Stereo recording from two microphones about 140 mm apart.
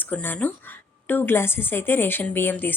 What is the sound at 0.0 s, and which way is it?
A woman's voice, 15° left (ahead or behind).